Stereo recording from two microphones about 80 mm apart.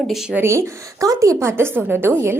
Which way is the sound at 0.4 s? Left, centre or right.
Right.